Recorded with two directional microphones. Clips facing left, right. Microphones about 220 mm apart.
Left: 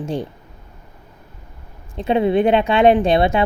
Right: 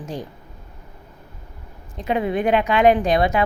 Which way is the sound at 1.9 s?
30° left (ahead or behind).